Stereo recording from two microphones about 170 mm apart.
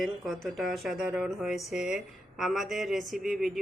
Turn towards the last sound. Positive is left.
turn(degrees=0)  # may be behind; listen again after turning